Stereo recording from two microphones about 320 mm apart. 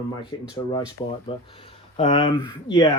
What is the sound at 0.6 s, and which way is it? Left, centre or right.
Speech, centre.